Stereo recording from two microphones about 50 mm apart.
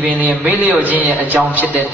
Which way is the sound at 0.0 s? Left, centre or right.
Right.